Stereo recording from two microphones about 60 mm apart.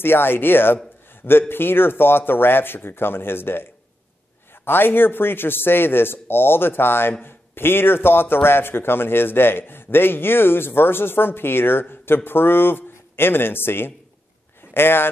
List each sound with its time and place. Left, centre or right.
0.0 s speech: left
4.6 s speech: left